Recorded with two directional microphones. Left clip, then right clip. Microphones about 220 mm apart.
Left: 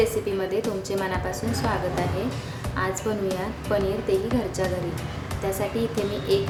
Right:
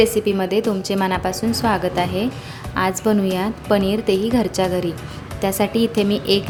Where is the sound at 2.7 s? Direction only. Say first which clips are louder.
Right 8 dB; 40° right (ahead or behind).